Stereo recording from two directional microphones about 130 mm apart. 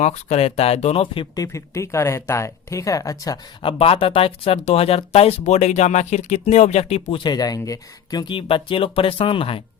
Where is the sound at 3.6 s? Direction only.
45° left (ahead or behind).